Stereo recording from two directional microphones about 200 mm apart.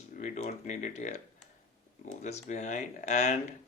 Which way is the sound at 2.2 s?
35° left (ahead or behind).